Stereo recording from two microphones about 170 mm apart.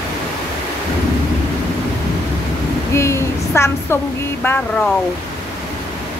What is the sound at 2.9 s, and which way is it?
Speech, 15° left (ahead or behind).